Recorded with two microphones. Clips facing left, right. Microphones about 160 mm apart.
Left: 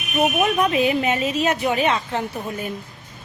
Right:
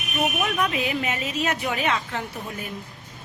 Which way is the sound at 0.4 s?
30° left (ahead or behind).